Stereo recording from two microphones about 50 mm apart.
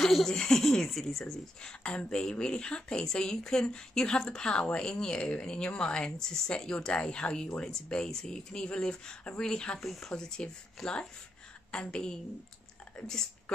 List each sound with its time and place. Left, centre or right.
0.0 s speech: centre
9.8 s speech: centre
10.8 s speech: centre
11.7 s speech: centre